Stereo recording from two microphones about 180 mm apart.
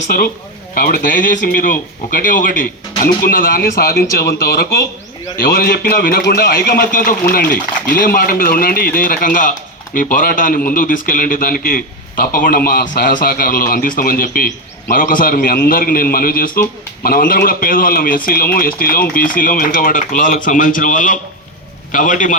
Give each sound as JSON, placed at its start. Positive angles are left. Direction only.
{"t": 0.7, "sound": "a man's voice", "side_deg": 50}